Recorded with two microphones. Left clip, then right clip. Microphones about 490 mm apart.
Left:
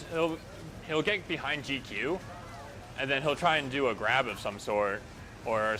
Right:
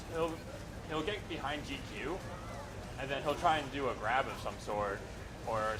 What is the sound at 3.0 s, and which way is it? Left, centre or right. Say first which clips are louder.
Speech: left 5 dB; left.